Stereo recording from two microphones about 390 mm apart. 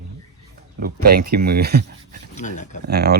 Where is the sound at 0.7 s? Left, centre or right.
Right.